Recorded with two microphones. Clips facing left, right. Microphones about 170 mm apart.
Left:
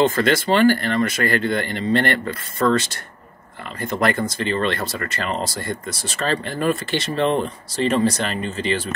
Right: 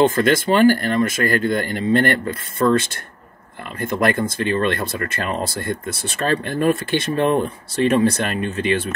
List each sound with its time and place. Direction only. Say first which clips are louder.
0.0 s speech: right 2 dB; 50° right (ahead or behind)